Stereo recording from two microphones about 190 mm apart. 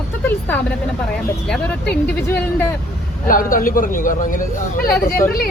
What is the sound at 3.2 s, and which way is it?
Speech, 45° left (ahead or behind).